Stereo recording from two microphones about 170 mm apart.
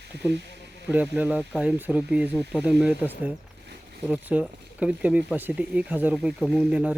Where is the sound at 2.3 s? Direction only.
10° left (ahead or behind).